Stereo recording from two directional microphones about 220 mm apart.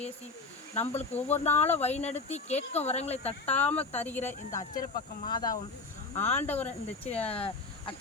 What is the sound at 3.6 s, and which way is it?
Speech, 5° left (ahead or behind).